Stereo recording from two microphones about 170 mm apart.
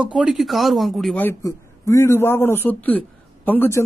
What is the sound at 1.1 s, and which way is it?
Speech, 15° left (ahead or behind).